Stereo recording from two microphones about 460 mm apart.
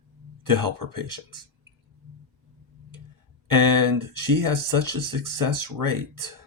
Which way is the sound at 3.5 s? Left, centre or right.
Right.